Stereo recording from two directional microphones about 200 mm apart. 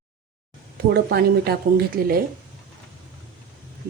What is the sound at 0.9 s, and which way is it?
Speech, 50° right (ahead or behind).